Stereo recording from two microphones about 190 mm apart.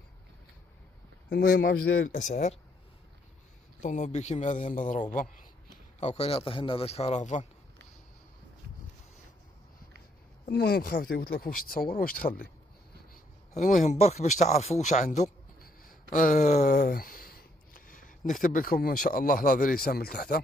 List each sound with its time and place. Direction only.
1.3 s speech: 55° left (ahead or behind); by 2.6 s 40° left (ahead or behind)
3.8 s a man's voice: 40° left (ahead or behind)
10.4 s speech: 55° left (ahead or behind)
13.6 s a man's voice: 40° left (ahead or behind)
15.6 s a sound: 45° left (ahead or behind)
16.7 s speech: 50° left (ahead or behind)